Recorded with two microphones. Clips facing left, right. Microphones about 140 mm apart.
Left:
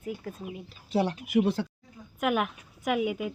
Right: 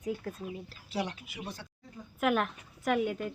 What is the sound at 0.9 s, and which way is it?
Speech, 30° left (ahead or behind).